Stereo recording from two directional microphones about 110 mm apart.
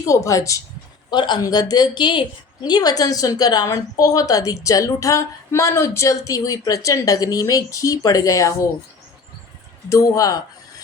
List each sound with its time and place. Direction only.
0.0 s speech: 30° left (ahead or behind)
1.1 s a woman's voice: 45° left (ahead or behind)
9.9 s a woman's voice: 30° left (ahead or behind)